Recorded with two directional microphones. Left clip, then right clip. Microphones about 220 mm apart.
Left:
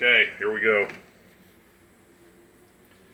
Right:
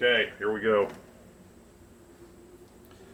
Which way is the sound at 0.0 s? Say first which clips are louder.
Left 5 dB; 30° left (ahead or behind).